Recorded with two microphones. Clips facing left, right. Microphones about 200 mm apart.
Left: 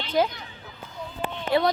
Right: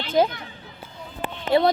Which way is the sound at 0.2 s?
25° right (ahead or behind).